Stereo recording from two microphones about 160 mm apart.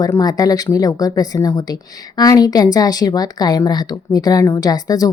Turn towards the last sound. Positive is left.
turn(degrees=25)  # may be behind; listen again after turning